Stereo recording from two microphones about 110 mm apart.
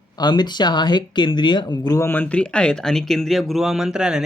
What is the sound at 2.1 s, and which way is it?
Speech, 15° left (ahead or behind).